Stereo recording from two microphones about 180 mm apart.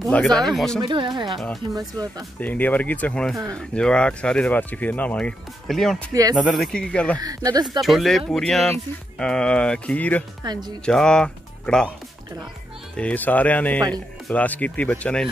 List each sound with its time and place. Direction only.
0.0 s speech: centre (ahead or behind)
0.8 s speech: 25° right (ahead or behind)
1.4 s speech: centre (ahead or behind)
1.8 s speech: 20° right (ahead or behind)
2.4 s speech: 10° left (ahead or behind)
7.2 s speech: 20° right (ahead or behind)
7.8 s speech: centre (ahead or behind)
10.4 s speech: 25° right (ahead or behind)
10.9 s speech: 5° left (ahead or behind)
12.9 s speech: 10° left (ahead or behind)
13.7 s speech: 20° right (ahead or behind)
14.2 s speech: 10° left (ahead or behind)